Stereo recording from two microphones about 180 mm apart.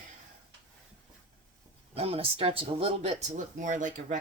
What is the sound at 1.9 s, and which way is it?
Speech, 35° right (ahead or behind).